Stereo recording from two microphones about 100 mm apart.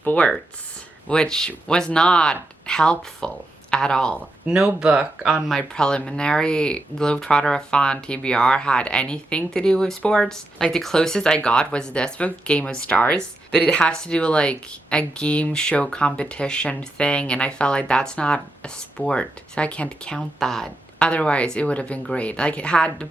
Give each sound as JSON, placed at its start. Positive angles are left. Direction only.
{"t": 0.0, "sound": "speech", "side_deg": 15}
{"t": 4.4, "sound": "speech", "side_deg": -10}